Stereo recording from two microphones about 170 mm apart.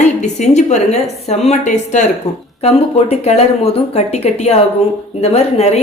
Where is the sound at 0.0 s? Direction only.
45° left (ahead or behind).